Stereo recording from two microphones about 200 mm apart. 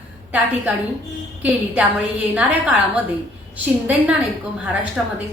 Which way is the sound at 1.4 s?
5° right (ahead or behind).